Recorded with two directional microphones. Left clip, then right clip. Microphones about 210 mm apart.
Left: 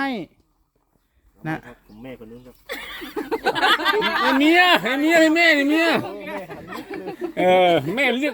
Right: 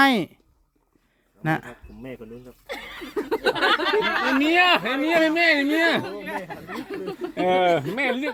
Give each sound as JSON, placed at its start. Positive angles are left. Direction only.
{"t": 0.0, "sound": "speech", "side_deg": -30}
{"t": 1.4, "sound": "speech", "side_deg": -20}
{"t": 2.6, "sound": "speech", "side_deg": 55}
{"t": 3.2, "sound": "a sound", "side_deg": -15}
{"t": 3.7, "sound": "a sound", "side_deg": 55}
{"t": 4.4, "sound": "speech", "side_deg": 35}
{"t": 6.2, "sound": "speech", "side_deg": -25}
{"t": 6.7, "sound": "speech", "side_deg": 15}
{"t": 7.0, "sound": "speech", "side_deg": -55}
{"t": 7.3, "sound": "speech", "side_deg": 50}